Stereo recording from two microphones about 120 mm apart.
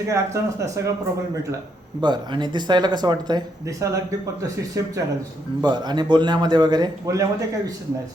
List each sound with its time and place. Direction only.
0.1 s speech: 25° right (ahead or behind)
2.0 s speech: 40° right (ahead or behind)